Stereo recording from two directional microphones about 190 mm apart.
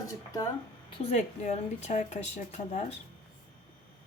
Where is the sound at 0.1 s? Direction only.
20° left (ahead or behind).